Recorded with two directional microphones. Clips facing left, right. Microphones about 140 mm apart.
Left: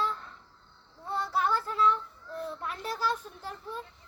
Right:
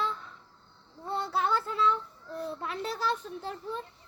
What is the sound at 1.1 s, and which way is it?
Speech, 25° right (ahead or behind).